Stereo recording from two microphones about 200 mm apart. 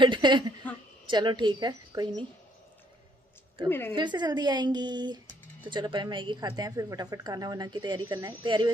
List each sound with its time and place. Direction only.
0.0 s a woman's voice: 25° right (ahead or behind)
3.6 s a woman's voice: 10° left (ahead or behind)
3.9 s a woman's voice: 20° right (ahead or behind)